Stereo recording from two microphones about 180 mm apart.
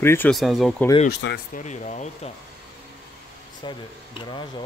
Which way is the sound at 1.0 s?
60° left (ahead or behind).